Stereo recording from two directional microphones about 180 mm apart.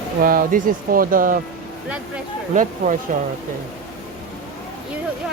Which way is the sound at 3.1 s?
45° right (ahead or behind).